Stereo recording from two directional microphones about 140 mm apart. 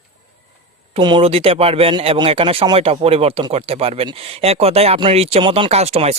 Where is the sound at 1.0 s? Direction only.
35° right (ahead or behind).